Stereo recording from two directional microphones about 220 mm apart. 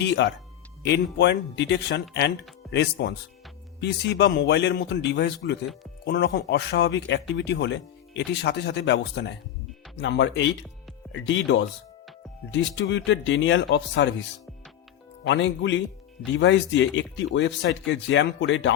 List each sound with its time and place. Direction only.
0.0 s speech: 50° left (ahead or behind)
15.2 s speech: 55° left (ahead or behind)